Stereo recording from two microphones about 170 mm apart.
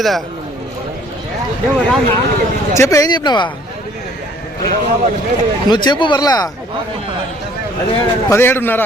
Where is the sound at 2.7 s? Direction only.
15° left (ahead or behind).